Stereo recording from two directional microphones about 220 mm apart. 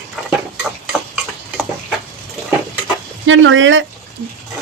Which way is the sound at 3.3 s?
60° right (ahead or behind).